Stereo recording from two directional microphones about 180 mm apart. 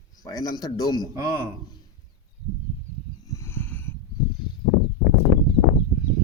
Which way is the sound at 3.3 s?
15° left (ahead or behind).